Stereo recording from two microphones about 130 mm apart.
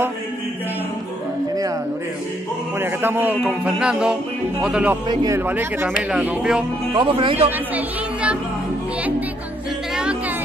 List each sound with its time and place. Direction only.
2.8 s music: 15° right (ahead or behind)
5.0 s a man's voice: 30° right (ahead or behind)
5.4 s music: 15° right (ahead or behind)
7.0 s speech: 40° right (ahead or behind)
7.7 s speech: 10° right (ahead or behind)